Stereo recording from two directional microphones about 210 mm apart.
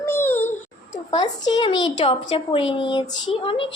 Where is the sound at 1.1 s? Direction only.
20° left (ahead or behind).